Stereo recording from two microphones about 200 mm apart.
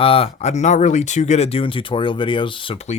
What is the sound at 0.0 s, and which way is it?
Speech, 30° left (ahead or behind).